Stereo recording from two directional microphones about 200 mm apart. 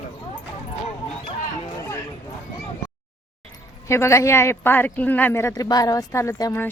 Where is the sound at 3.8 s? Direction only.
15° left (ahead or behind).